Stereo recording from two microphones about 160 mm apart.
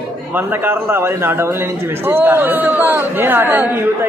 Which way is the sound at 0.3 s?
15° right (ahead or behind).